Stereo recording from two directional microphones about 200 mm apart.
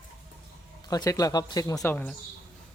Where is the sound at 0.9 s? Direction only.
20° left (ahead or behind).